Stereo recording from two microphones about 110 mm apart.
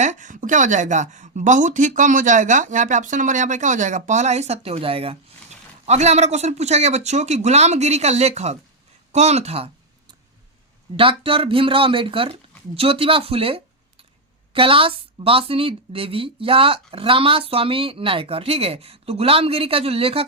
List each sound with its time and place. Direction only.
0.9 s speech: 90° right; by 5.1 s 60° right (ahead or behind)
5.8 s speech: 80° right
10.9 s a woman's voice: 55° right (ahead or behind)